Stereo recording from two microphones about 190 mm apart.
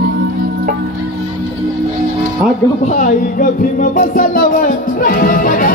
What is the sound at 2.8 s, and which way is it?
Music, 45° left (ahead or behind).